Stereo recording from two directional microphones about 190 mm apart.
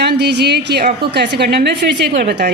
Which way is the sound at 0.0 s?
60° right (ahead or behind).